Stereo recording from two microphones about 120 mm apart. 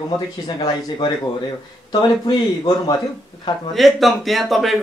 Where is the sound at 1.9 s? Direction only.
40° left (ahead or behind).